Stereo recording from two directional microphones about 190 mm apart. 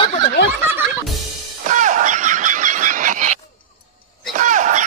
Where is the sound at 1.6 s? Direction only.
40° right (ahead or behind).